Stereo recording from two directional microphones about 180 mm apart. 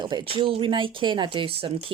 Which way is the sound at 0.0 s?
25° right (ahead or behind).